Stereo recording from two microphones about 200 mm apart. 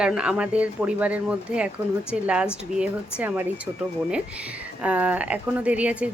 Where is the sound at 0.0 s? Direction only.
5° right (ahead or behind).